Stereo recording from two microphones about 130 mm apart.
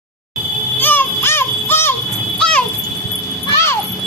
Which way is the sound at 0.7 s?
15° left (ahead or behind).